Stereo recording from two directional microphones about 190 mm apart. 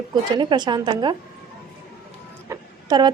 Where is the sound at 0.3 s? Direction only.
25° right (ahead or behind).